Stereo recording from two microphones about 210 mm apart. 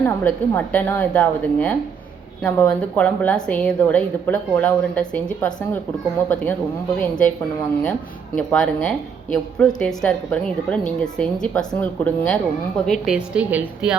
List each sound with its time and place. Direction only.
0.0 s a woman's voice: 10° left (ahead or behind)
8.4 s a woman's voice: 5° left (ahead or behind)